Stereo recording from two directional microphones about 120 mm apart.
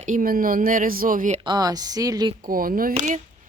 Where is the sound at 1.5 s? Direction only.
35° right (ahead or behind).